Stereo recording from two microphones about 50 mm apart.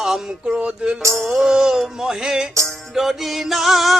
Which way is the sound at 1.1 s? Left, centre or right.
Centre.